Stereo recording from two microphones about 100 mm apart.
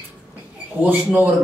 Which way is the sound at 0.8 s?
15° right (ahead or behind).